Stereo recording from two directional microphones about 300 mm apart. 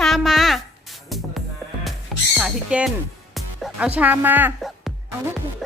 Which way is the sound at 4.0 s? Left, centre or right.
Centre.